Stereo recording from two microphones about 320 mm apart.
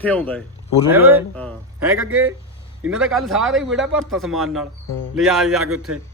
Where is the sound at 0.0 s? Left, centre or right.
Centre.